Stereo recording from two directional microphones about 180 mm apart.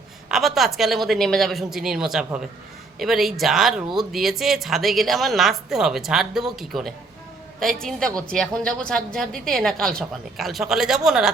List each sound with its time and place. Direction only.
0.3 s a woman's voice: centre (ahead or behind)